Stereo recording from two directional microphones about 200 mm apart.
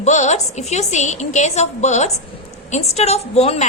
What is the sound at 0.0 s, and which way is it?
A woman's voice, 35° left (ahead or behind).